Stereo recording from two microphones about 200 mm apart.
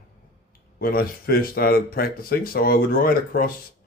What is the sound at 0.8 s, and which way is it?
A man's voice, 50° left (ahead or behind).